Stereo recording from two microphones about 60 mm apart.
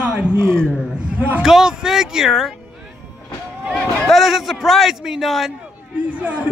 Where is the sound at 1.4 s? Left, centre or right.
Centre.